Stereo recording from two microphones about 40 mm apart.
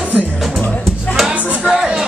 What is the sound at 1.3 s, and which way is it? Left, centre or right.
Music, right.